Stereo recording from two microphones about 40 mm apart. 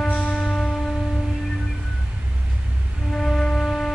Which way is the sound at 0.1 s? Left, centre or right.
Left.